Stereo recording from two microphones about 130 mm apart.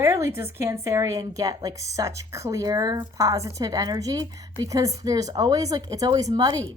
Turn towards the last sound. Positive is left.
turn(degrees=-30)  # may be behind; listen again after turning